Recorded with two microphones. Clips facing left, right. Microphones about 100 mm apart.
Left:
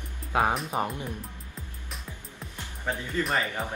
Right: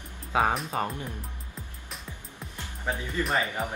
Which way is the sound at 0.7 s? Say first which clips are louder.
Left 1 dB; 15° left (ahead or behind).